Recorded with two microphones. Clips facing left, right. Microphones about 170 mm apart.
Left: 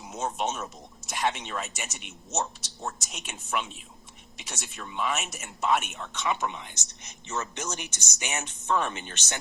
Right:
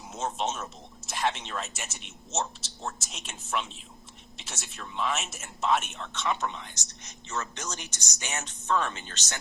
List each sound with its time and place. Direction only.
0.1 s speech: centre (ahead or behind); by 9.4 s 15° left (ahead or behind)